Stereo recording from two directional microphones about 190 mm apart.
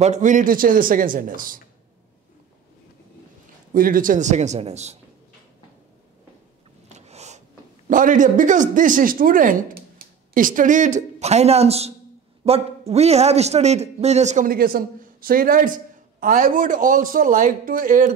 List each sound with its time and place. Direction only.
0.0 s a man's voice: 40° right (ahead or behind)
3.7 s a man's voice: 45° right (ahead or behind)
6.9 s a sound: 35° right (ahead or behind)
7.9 s a man's voice: 45° right (ahead or behind)